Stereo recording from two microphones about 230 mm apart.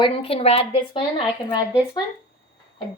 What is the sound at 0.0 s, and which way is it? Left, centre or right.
A woman's voice, left.